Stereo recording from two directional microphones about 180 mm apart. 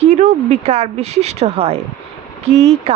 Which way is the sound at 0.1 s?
40° right (ahead or behind).